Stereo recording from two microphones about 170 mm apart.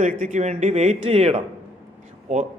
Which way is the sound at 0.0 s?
50° right (ahead or behind).